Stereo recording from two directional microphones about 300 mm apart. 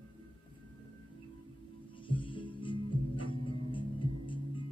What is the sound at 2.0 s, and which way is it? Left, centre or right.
Music, centre.